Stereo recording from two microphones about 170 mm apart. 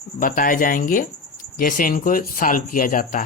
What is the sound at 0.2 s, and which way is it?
Speech, 55° left (ahead or behind).